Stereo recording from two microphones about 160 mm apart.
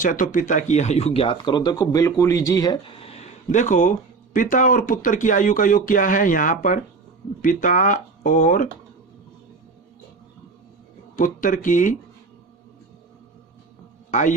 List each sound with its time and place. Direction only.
0.0 s speech: 55° left (ahead or behind); by 2.9 s 25° left (ahead or behind)
2.9 s a sound: 35° left (ahead or behind); by 3.9 s 50° left (ahead or behind)
4.4 s speech: 55° left (ahead or behind)
11.2 s speech: 55° left (ahead or behind)
14.1 s a man's voice: 50° left (ahead or behind)